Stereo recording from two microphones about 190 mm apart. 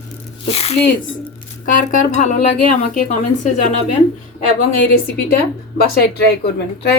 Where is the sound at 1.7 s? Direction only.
45° left (ahead or behind).